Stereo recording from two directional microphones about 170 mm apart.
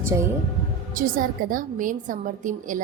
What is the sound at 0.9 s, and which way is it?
A woman's voice, 55° right (ahead or behind).